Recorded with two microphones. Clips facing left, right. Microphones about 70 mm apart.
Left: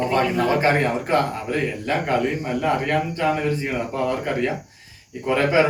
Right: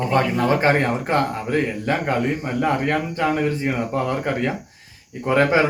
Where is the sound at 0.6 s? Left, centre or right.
Right.